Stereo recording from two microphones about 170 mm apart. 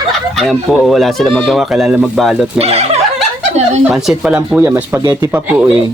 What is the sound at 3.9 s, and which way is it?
Speech, 5° right (ahead or behind).